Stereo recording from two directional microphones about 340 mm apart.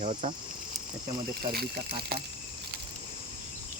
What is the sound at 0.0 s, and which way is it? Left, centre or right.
Speech, centre.